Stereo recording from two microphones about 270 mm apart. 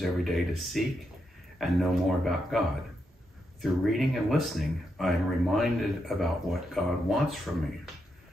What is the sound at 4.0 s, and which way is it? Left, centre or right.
Speech, centre.